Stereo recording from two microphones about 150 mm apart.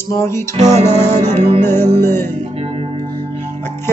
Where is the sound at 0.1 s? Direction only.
20° left (ahead or behind).